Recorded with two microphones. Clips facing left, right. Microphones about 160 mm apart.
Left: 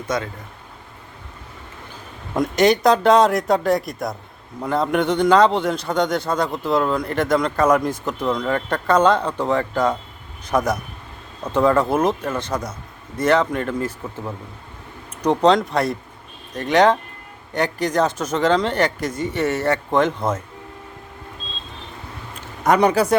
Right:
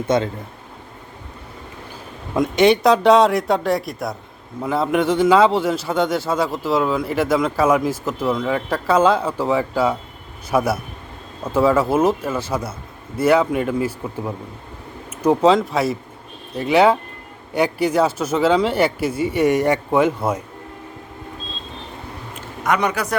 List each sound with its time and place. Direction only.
0.1 s speech: 25° right (ahead or behind)
2.3 s a man's voice: centre (ahead or behind)
22.6 s speech: 35° left (ahead or behind)